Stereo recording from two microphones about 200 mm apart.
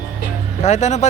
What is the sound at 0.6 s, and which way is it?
Speech, 35° left (ahead or behind).